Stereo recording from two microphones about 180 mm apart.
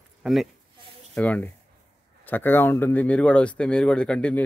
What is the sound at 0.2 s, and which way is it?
Speech, centre (ahead or behind).